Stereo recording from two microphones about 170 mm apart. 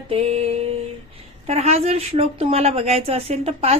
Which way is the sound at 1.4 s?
40° right (ahead or behind).